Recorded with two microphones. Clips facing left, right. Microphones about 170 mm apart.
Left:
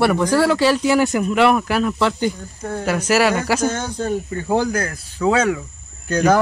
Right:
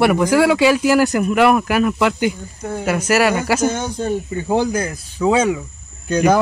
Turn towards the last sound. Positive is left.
turn(degrees=-10)  # may be behind; listen again after turning